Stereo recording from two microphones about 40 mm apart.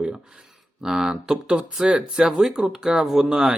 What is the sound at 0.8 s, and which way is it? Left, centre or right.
Speech, centre.